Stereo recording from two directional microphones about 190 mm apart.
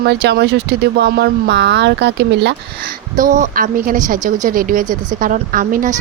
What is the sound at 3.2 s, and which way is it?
Speech, 45° right (ahead or behind).